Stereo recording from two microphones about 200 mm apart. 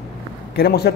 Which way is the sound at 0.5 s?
55° left (ahead or behind).